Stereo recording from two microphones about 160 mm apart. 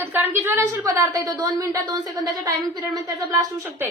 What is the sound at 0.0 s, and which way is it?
A woman's voice, 15° right (ahead or behind).